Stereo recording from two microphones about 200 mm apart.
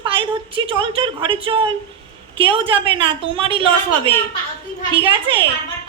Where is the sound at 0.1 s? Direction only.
25° right (ahead or behind).